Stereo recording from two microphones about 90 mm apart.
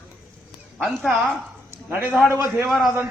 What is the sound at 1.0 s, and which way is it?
A man's voice, 15° right (ahead or behind).